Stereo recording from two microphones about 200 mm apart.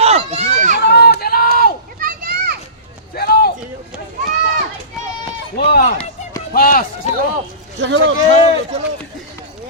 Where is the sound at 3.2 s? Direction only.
50° left (ahead or behind).